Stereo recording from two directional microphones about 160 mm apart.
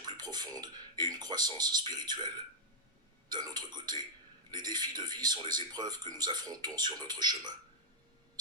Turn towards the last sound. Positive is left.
turn(degrees=-25)  # may be behind; listen again after turning